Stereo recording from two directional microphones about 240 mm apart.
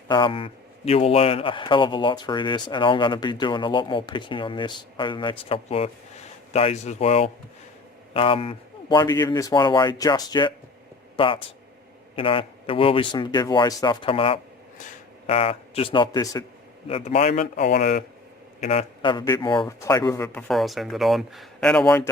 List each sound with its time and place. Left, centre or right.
0.1 s a man's voice: left
20.5 s speech: centre